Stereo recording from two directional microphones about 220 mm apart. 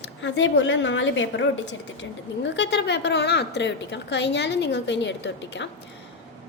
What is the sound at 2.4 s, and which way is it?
A woman's voice, 55° left (ahead or behind).